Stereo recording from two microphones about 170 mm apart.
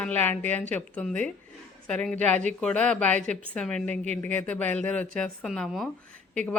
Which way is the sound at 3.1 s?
45° right (ahead or behind).